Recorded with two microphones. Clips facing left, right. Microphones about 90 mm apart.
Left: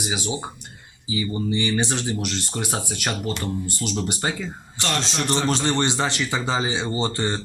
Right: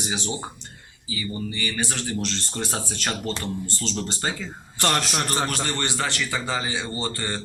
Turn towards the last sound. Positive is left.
turn(degrees=20)  # may be behind; listen again after turning